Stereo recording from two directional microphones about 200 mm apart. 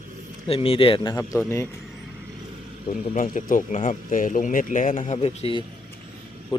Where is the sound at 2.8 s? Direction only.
40° left (ahead or behind).